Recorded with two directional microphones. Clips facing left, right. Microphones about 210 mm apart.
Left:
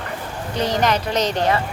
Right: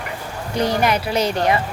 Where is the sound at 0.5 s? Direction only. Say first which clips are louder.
Right 1 dB; 10° right (ahead or behind).